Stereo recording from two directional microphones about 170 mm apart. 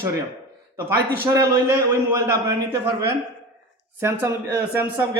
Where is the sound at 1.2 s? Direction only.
15° right (ahead or behind).